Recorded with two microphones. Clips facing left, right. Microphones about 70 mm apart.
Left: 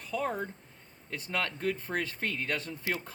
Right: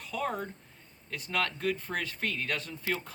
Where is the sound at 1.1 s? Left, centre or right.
Left.